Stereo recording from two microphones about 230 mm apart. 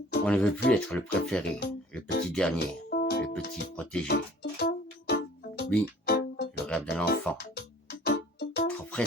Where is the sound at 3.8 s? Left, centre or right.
Centre.